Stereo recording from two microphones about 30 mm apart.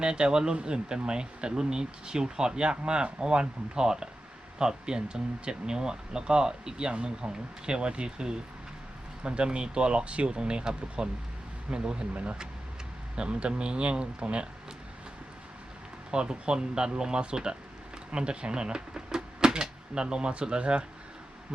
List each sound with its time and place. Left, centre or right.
0.0 s speech: right
12.1 s speech: right
13.1 s speech: right
16.1 s speech: right